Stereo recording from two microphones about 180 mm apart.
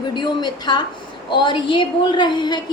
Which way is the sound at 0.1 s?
25° left (ahead or behind).